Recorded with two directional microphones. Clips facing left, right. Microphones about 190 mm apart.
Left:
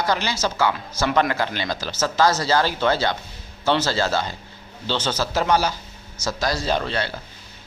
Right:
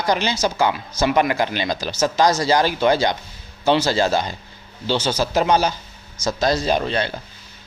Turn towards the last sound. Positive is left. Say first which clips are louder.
# right 3 dB
turn(degrees=-20)  # may be behind; listen again after turning